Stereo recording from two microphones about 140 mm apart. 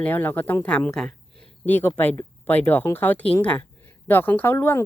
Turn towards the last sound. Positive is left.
turn(degrees=15)  # may be behind; listen again after turning